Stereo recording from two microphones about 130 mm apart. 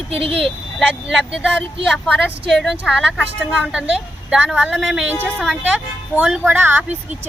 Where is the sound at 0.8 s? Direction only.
5° right (ahead or behind).